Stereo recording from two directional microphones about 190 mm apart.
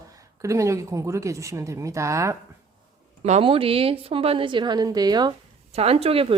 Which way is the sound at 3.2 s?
35° right (ahead or behind).